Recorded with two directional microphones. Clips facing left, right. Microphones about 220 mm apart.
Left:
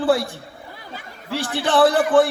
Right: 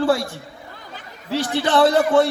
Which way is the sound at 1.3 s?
20° right (ahead or behind).